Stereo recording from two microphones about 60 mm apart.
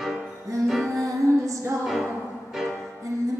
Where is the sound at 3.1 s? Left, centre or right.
Right.